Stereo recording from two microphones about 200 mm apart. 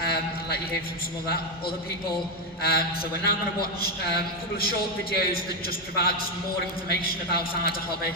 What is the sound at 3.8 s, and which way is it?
A man's voice, 50° left (ahead or behind).